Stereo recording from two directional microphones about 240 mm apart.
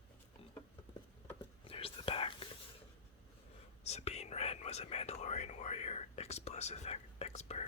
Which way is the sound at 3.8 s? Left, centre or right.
Left.